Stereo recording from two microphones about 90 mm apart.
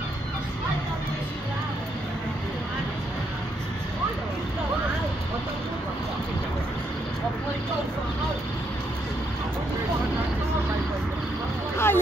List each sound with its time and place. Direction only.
11.7 s vehicle: 25° left (ahead or behind)